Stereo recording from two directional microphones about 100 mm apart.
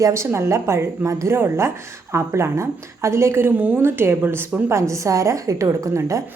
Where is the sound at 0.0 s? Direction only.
30° right (ahead or behind).